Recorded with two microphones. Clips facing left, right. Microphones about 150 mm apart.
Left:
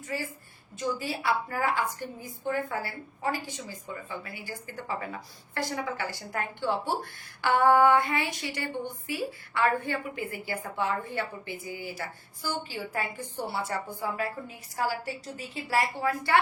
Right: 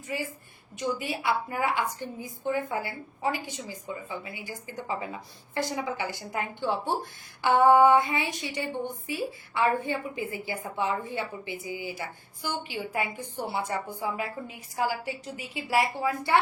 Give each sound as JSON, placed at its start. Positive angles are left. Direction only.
{"t": 0.8, "sound": "a woman's voice", "side_deg": -20}